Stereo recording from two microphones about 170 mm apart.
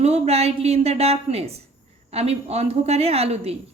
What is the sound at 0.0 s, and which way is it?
A woman's voice, 40° right (ahead or behind).